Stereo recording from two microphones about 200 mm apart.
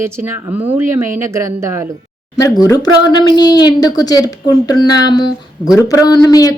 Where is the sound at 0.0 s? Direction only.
10° right (ahead or behind).